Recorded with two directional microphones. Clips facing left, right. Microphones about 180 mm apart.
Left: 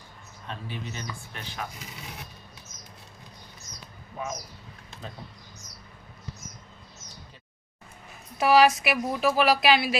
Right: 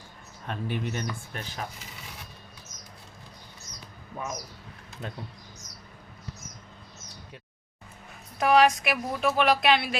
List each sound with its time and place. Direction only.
0.4 s speech: 55° right (ahead or behind)
8.4 s a woman's voice: 5° left (ahead or behind)